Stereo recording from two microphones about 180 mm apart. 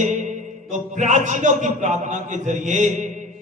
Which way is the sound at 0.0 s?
40° right (ahead or behind).